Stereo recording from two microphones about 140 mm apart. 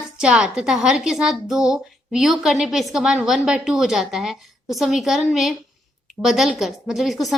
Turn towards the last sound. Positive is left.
turn(degrees=0)  # may be behind; listen again after turning